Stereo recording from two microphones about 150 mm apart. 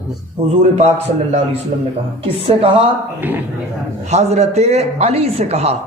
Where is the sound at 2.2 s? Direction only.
40° right (ahead or behind).